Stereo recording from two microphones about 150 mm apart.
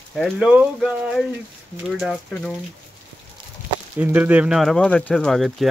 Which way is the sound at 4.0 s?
10° right (ahead or behind).